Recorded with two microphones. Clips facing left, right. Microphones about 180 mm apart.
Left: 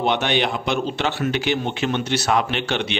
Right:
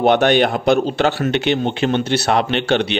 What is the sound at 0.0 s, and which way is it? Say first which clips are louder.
Speech: right 7 dB; 50° right (ahead or behind).